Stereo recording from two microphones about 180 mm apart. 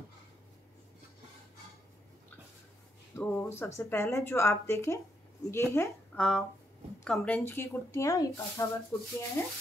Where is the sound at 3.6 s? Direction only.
15° left (ahead or behind).